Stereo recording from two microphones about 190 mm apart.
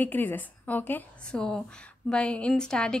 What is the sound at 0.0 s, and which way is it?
A woman's voice, 10° left (ahead or behind).